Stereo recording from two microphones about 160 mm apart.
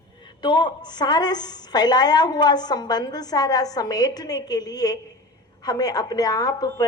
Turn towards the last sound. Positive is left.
turn(degrees=20)  # may be behind; listen again after turning